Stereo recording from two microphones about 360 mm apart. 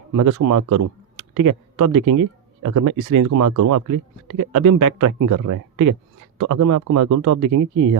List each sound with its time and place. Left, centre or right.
0.2 s a man's voice: right